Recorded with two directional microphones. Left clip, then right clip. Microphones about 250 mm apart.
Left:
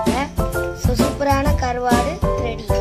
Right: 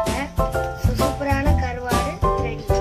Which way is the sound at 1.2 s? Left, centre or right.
Centre.